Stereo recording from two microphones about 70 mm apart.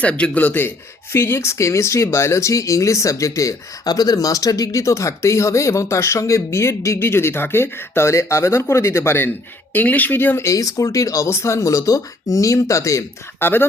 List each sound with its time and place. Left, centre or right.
0.0 s speech: centre; by 9.3 s left
9.7 s speech: left
10.4 s speech: left
11.3 s speech: left
13.4 s speech: left